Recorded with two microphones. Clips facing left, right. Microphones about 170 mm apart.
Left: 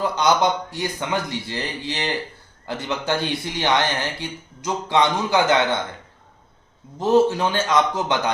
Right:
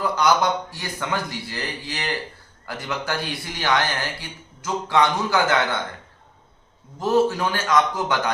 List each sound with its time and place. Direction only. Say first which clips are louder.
0.0 s speech: left 1 dB; 20° left (ahead or behind)
7.0 s speech: left 3 dB; 20° left (ahead or behind)